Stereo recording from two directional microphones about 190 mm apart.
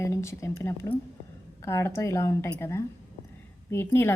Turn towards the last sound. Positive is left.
turn(degrees=10)  # may be behind; listen again after turning